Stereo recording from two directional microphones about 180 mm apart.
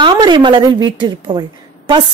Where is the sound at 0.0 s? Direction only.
25° right (ahead or behind).